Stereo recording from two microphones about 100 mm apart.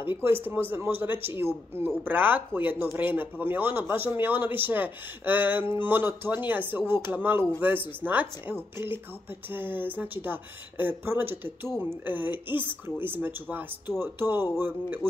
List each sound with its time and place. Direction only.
0.2 s speech: 20° right (ahead or behind)